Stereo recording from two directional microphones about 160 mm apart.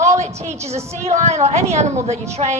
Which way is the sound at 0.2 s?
45° right (ahead or behind).